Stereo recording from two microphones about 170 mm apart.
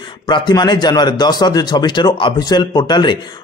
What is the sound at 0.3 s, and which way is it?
A man's voice, 25° left (ahead or behind).